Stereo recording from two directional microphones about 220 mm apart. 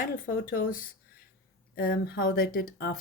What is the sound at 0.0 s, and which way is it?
Speech, 40° left (ahead or behind).